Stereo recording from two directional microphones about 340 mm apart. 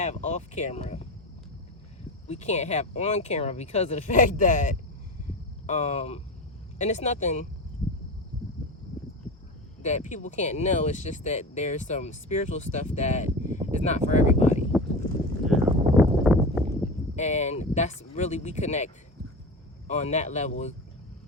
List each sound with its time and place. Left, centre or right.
0.0 s speech: centre
2.2 s speech: centre
9.8 s speech: left
15.4 s clip-clop: centre
17.2 s speech: centre
19.9 s speech: centre